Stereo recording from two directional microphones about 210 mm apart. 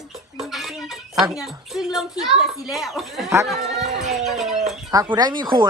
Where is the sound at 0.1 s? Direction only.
Centre (ahead or behind).